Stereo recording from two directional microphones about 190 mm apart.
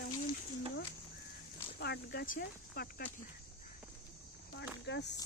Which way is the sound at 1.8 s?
60° left (ahead or behind).